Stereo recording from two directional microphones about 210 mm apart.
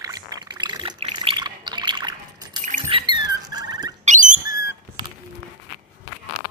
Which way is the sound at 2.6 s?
35° right (ahead or behind).